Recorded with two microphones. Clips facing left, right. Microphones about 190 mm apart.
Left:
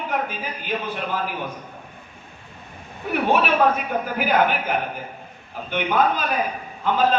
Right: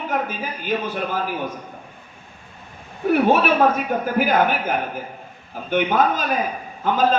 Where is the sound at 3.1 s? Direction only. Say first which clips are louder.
Right 3 dB; 45° right (ahead or behind).